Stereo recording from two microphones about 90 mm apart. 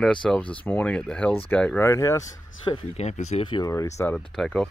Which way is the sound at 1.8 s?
35° left (ahead or behind).